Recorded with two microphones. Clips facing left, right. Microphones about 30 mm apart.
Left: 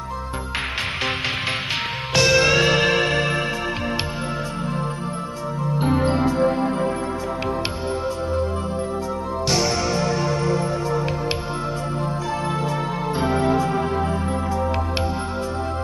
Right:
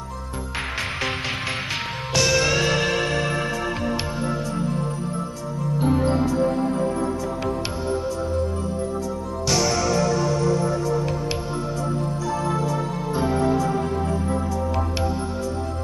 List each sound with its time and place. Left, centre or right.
2.1 s music: left
5.8 s music: left
9.5 s music: left
12.4 s music: left